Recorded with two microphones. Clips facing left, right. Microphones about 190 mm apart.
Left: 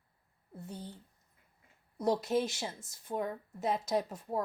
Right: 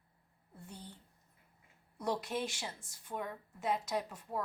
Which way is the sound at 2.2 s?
40° left (ahead or behind).